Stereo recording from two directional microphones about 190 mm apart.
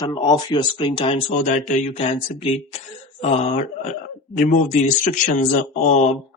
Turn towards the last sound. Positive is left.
turn(degrees=40)  # may be behind; listen again after turning